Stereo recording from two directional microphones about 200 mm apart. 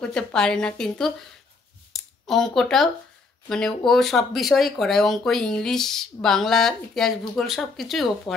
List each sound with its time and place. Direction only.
0.0 s speech: 5° left (ahead or behind)
1.9 s a sound: centre (ahead or behind)
3.4 s speech: 5° left (ahead or behind)